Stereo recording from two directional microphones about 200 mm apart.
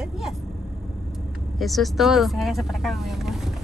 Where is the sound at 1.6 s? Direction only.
Centre (ahead or behind).